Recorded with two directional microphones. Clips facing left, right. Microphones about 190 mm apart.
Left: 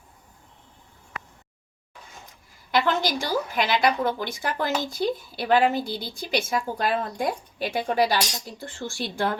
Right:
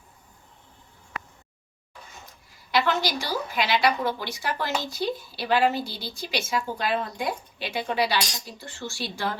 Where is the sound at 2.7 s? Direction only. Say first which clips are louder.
Left 1 dB; 50° left (ahead or behind).